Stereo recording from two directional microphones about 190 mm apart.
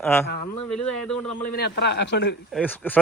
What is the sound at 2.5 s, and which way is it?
Speech, 10° left (ahead or behind).